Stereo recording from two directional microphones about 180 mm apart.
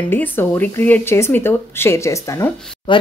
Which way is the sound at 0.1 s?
10° left (ahead or behind).